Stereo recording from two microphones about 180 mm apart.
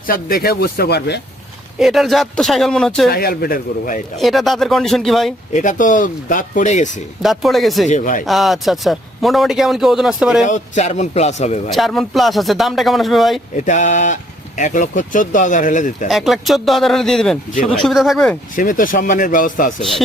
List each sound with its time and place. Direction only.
0.1 s speech: 55° left (ahead or behind)
1.8 s a man's voice: centre (ahead or behind)
3.1 s speech: 60° left (ahead or behind)
4.2 s a man's voice: centre (ahead or behind)
5.5 s speech: 45° left (ahead or behind)
7.2 s a man's voice: centre (ahead or behind)
7.9 s speech: 45° left (ahead or behind)
8.2 s a man's voice: centre (ahead or behind)
10.4 s a man's voice: 40° left (ahead or behind)
11.7 s a man's voice: centre (ahead or behind)
13.6 s speech: 40° left (ahead or behind)
16.0 s a man's voice: centre (ahead or behind)
18.5 s speech: 50° left (ahead or behind)
19.8 s a man's voice: centre (ahead or behind)